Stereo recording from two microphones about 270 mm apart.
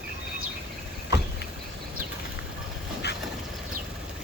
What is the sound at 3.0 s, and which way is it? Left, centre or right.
Vehicle, left.